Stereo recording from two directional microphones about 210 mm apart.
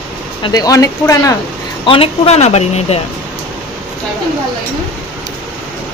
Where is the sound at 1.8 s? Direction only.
25° left (ahead or behind).